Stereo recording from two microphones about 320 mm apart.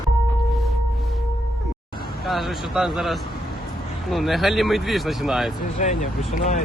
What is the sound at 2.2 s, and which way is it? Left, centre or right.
Speech, centre.